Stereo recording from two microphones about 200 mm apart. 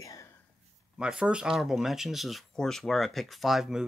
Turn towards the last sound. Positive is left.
turn(degrees=0)  # may be behind; listen again after turning